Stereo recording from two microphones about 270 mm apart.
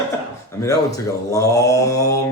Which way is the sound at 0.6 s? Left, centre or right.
Centre.